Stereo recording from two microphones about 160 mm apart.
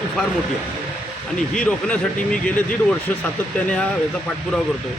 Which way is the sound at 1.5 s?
5° left (ahead or behind).